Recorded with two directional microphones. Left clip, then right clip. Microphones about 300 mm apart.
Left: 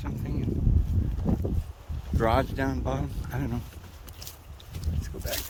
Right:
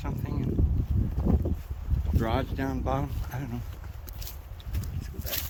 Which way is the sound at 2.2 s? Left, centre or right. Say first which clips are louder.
Left 5 dB; centre.